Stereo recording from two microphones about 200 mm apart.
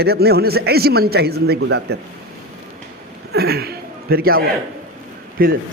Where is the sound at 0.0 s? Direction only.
50° right (ahead or behind).